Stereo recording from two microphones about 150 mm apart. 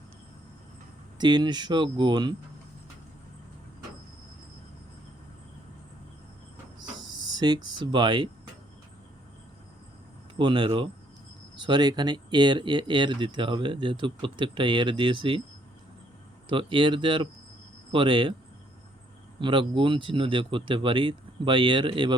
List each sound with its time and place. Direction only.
1.2 s speech: 30° right (ahead or behind)
7.3 s speech: 30° right (ahead or behind)
10.3 s speech: 35° right (ahead or behind)
16.5 s speech: 35° right (ahead or behind)
19.4 s speech: 35° right (ahead or behind)